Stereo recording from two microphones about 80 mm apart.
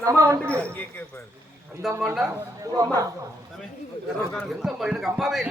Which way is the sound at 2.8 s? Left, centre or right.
Right.